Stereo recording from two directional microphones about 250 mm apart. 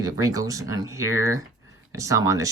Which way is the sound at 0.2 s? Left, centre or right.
Centre.